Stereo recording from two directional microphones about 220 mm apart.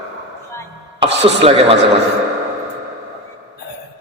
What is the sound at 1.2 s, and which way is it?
Speech, 25° right (ahead or behind).